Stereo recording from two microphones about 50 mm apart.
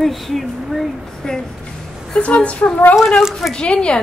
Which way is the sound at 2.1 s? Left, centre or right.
Left.